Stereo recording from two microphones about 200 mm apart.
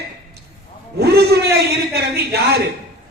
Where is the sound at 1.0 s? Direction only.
55° right (ahead or behind).